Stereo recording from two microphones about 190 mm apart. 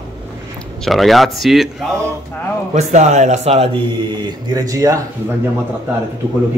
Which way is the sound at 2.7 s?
40° right (ahead or behind).